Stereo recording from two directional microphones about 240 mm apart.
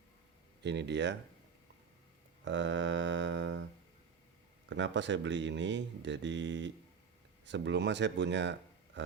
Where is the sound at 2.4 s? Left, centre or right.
Right.